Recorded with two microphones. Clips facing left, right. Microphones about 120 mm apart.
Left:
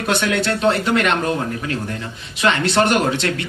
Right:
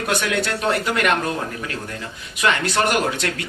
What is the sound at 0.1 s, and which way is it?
Speech, 30° left (ahead or behind).